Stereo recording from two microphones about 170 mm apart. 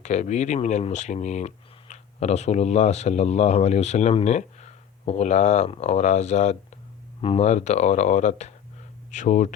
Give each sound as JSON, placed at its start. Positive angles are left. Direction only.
{"t": 0.0, "sound": "speech", "side_deg": 45}